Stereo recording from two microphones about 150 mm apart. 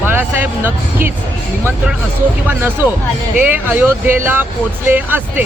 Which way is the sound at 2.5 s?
15° right (ahead or behind).